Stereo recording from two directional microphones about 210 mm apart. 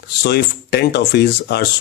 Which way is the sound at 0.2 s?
50° left (ahead or behind).